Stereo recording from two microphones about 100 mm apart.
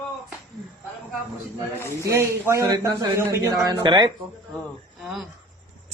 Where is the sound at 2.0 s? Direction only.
30° right (ahead or behind).